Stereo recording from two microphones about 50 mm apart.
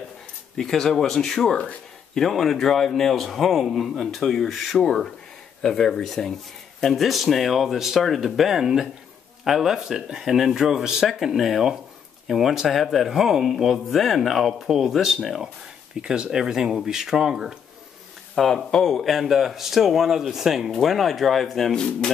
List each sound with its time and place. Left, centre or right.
0.6 s a man's voice: centre
18.3 s a man's voice: centre
21.7 s speech: centre